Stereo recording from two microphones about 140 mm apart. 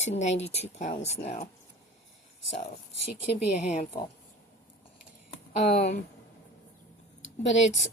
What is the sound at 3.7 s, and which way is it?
Speech, 45° left (ahead or behind).